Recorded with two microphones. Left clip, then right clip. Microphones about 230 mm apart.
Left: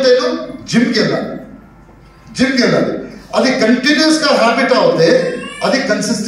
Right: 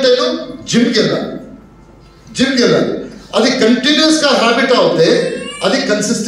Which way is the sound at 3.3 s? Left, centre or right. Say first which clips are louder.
Right 1 dB; centre.